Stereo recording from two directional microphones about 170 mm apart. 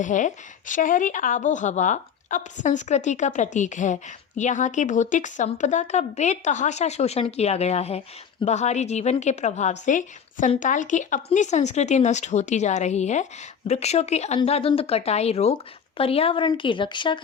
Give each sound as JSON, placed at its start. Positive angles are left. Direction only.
{"t": 0.0, "sound": "a woman's voice", "side_deg": 45}